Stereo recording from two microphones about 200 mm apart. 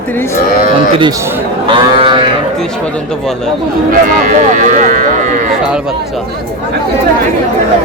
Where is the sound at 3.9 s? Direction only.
40° right (ahead or behind).